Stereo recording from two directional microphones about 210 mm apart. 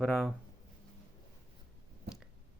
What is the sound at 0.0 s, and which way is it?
Speech, centre (ahead or behind).